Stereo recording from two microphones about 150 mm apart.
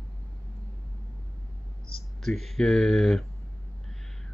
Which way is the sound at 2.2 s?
Centre (ahead or behind).